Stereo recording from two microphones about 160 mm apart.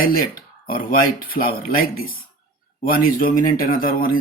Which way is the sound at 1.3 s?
65° left (ahead or behind).